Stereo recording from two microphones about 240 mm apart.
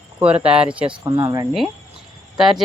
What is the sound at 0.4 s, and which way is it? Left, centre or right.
Speech, centre.